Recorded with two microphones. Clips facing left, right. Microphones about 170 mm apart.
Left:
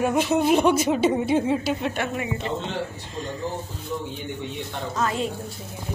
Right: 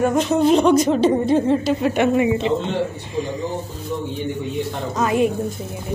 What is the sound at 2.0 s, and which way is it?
Speech, 20° right (ahead or behind).